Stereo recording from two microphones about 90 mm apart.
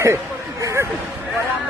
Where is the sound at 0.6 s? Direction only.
40° right (ahead or behind).